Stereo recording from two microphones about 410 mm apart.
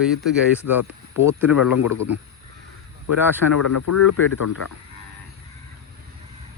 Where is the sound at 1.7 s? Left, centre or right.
Left.